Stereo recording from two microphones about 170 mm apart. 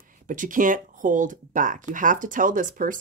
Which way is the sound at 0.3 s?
50° right (ahead or behind).